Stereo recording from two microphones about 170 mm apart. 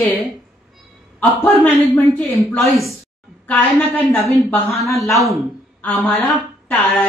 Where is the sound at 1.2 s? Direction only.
10° left (ahead or behind).